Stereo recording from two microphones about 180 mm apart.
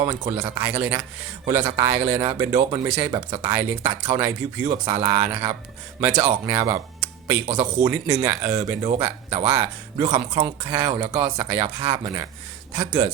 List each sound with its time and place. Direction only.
0.0 s speech: 30° right (ahead or behind)
0.7 s speech: 15° right (ahead or behind)
3.5 s speech: 15° right (ahead or behind)
7.4 s a man's voice: 35° right (ahead or behind)
7.9 s speech: 15° right (ahead or behind)